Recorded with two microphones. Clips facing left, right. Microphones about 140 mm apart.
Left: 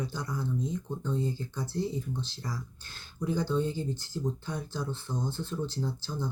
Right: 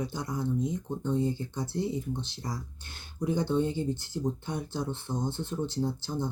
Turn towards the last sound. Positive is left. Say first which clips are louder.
# right 3 dB
turn(degrees=-20)  # may be behind; listen again after turning